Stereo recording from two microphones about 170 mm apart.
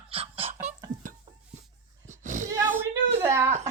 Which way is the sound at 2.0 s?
45° right (ahead or behind).